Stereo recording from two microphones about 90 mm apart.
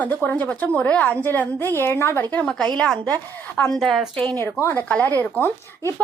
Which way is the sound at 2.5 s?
5° left (ahead or behind).